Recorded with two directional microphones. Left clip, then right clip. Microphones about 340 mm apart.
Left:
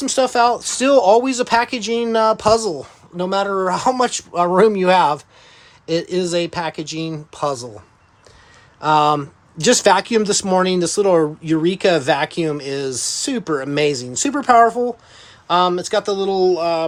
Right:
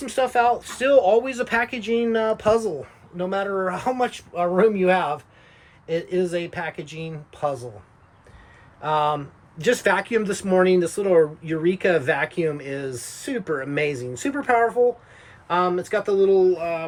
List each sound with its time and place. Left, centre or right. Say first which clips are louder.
0.0 s speech: left 5 dB; centre
8.8 s speech: left 7 dB; left
15.4 s speech: left 6 dB; centre